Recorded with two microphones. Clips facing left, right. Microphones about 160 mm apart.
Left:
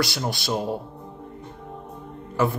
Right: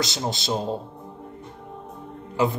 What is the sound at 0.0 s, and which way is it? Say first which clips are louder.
Speech: left 1 dB; 20° right (ahead or behind).